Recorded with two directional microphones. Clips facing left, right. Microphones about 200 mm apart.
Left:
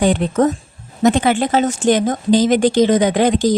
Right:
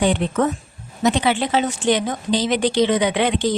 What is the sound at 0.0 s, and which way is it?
Speech, 40° left (ahead or behind).